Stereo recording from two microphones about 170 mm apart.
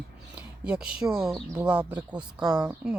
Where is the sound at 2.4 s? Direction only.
25° right (ahead or behind).